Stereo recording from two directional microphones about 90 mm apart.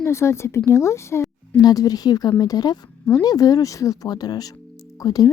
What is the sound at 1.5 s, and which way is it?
Speech, 45° left (ahead or behind).